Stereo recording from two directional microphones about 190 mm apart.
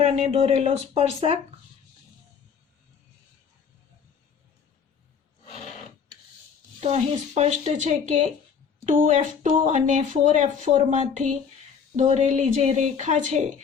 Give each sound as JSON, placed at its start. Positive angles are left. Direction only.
{"t": 0.0, "sound": "speech", "side_deg": -35}
{"t": 6.7, "sound": "speech", "side_deg": -35}